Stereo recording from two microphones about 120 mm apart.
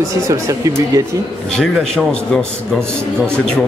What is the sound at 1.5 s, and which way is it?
Speech, 5° left (ahead or behind).